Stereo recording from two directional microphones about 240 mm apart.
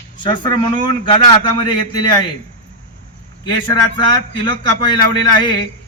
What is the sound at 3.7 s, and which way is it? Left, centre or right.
Speech, centre.